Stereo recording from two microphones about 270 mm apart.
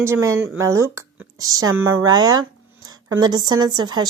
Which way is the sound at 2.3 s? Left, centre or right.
Centre.